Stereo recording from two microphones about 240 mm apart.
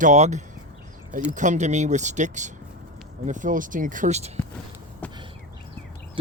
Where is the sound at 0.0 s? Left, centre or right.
Right.